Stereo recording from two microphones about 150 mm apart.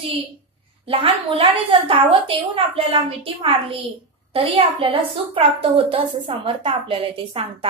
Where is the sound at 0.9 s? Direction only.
40° right (ahead or behind).